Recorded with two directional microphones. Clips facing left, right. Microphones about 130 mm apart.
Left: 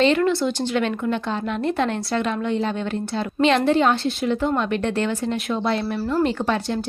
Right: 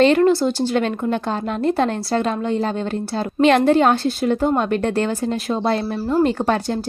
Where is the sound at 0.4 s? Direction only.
40° right (ahead or behind).